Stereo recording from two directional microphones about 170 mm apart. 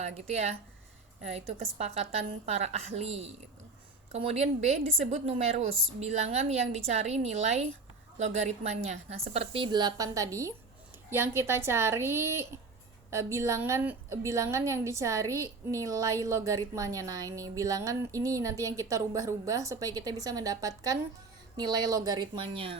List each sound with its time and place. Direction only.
0.0 s a woman's voice: 40° right (ahead or behind)